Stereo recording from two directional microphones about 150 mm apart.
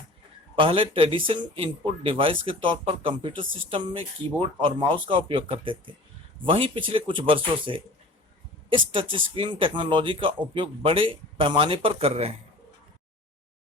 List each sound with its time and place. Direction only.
0.5 s speech: 35° right (ahead or behind)
8.9 s speech: 35° right (ahead or behind)